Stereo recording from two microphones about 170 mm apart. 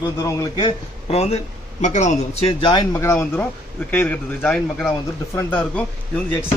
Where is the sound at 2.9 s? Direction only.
15° left (ahead or behind).